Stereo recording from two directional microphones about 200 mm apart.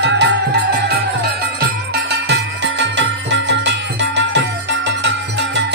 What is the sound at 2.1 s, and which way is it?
Music, 55° right (ahead or behind).